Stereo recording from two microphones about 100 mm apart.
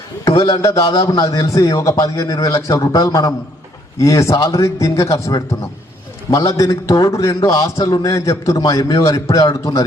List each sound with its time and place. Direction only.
0.3 s a man's voice: 35° left (ahead or behind)